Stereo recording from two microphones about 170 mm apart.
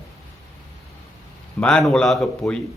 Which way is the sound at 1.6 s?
5° left (ahead or behind).